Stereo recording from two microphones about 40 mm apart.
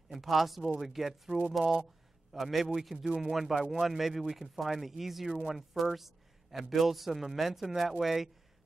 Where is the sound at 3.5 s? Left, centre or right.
Right.